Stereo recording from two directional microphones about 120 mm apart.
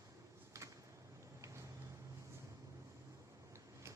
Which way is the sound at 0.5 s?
25° right (ahead or behind).